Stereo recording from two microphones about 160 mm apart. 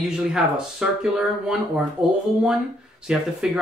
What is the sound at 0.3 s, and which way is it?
Speech, 5° right (ahead or behind).